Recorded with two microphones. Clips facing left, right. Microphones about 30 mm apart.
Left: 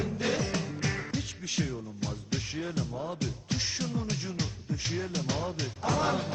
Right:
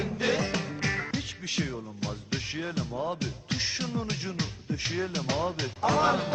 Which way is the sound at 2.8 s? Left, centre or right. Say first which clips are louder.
Right 2 dB; right.